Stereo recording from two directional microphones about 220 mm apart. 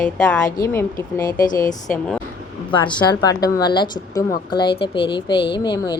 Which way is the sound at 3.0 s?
20° left (ahead or behind).